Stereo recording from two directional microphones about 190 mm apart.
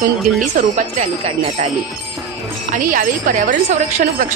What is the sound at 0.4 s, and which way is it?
A woman's voice, 40° right (ahead or behind).